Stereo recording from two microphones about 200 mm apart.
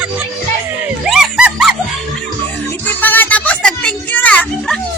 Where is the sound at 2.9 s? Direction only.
10° left (ahead or behind).